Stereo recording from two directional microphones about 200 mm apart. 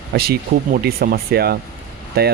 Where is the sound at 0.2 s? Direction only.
50° right (ahead or behind).